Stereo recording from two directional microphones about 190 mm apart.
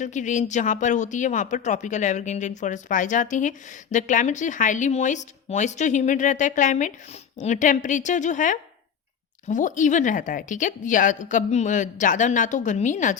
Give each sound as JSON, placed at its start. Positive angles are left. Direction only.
{"t": 0.0, "sound": "speech", "side_deg": 40}